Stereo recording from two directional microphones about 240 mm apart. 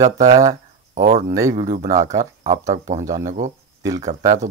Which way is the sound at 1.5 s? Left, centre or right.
Right.